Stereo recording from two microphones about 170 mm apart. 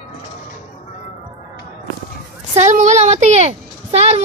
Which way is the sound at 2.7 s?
45° right (ahead or behind).